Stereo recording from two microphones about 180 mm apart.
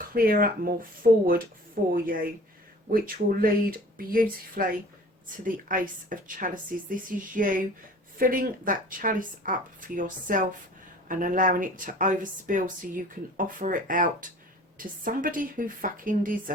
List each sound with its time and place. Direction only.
0.1 s speech: 55° right (ahead or behind)
1.9 s speech: 50° right (ahead or behind)